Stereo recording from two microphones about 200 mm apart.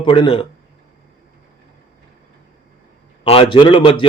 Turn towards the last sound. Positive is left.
turn(degrees=25)  # may be behind; listen again after turning